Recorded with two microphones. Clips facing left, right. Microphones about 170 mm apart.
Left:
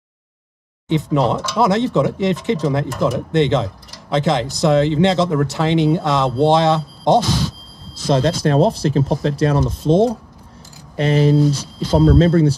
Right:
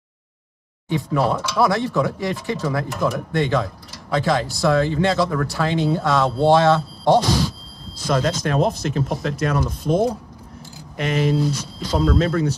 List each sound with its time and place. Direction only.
0.8 s speech: 20° left (ahead or behind)